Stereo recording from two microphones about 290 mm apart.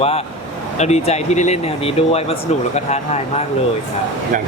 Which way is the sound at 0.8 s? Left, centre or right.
Left.